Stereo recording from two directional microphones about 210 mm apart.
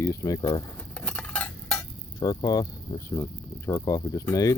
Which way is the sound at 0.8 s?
5° left (ahead or behind).